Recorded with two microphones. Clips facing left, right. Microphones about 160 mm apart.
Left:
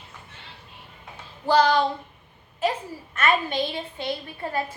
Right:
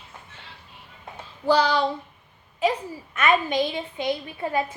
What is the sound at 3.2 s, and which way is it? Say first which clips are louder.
A woman's voice: right 2 dB; 15° right (ahead or behind).